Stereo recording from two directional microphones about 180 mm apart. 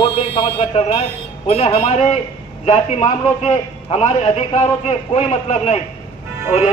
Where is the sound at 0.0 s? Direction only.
30° left (ahead or behind).